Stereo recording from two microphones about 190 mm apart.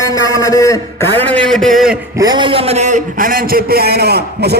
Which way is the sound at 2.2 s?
20° right (ahead or behind).